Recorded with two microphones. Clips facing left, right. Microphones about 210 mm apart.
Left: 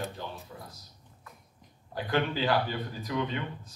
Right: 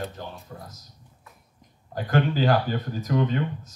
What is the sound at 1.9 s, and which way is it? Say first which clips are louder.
Speech: right 5 dB; 45° right (ahead or behind).